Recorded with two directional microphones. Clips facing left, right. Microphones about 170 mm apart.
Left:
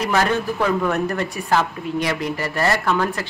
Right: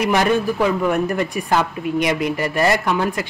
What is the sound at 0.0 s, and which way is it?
Speech, 15° right (ahead or behind).